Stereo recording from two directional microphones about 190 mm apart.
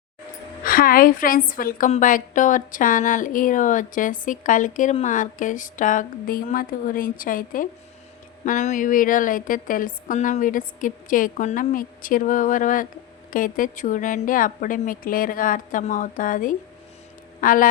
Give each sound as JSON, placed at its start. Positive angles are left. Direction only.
{"t": 0.6, "sound": "speech", "side_deg": 50}